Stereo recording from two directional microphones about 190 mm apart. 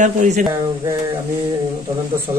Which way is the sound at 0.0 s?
40° right (ahead or behind).